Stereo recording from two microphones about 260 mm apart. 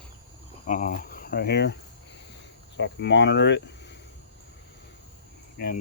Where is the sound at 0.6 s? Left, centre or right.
Left.